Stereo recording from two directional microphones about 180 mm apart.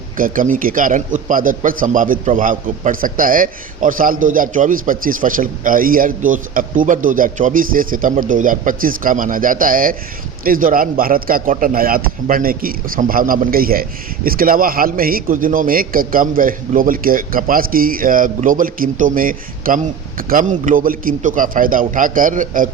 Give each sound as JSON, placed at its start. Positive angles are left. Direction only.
{"t": 0.2, "sound": "a man's voice", "side_deg": -50}